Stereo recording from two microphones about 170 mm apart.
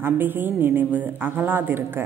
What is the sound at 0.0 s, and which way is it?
A woman's voice, 10° right (ahead or behind).